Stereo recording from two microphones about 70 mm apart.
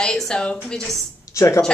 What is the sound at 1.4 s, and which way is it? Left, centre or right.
Speech, left.